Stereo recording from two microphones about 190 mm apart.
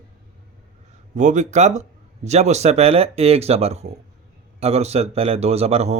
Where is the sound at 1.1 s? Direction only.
40° right (ahead or behind).